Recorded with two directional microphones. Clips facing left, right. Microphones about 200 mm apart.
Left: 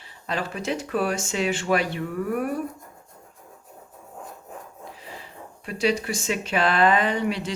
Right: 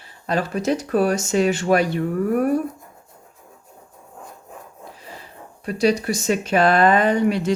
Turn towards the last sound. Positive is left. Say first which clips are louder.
# right 7 dB
turn(degrees=-45)  # may be behind; listen again after turning